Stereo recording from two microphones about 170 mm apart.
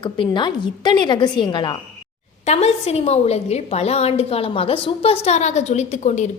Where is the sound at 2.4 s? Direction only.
40° left (ahead or behind).